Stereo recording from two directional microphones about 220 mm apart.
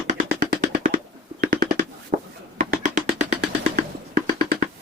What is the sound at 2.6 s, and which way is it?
Music, 35° right (ahead or behind).